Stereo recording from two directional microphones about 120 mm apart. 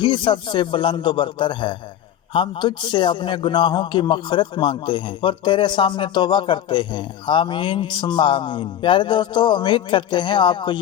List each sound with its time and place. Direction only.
0.0 s a man's voice: 40° left (ahead or behind)